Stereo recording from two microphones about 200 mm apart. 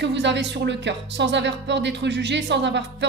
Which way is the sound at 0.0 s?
60° right (ahead or behind).